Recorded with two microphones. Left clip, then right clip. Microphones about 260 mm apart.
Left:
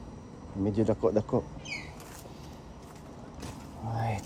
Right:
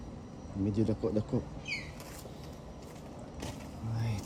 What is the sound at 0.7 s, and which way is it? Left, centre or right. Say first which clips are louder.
Speech: left 7 dB; centre.